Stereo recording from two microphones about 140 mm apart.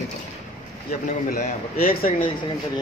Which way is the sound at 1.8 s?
90° left.